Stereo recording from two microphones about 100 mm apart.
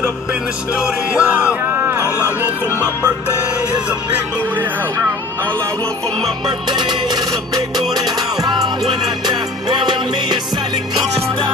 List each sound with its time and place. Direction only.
0.7 s speech: 10° right (ahead or behind)
6.4 s music: 50° right (ahead or behind)